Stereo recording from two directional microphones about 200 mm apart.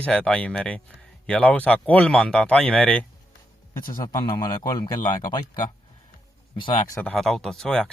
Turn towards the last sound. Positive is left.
turn(degrees=5)  # may be behind; listen again after turning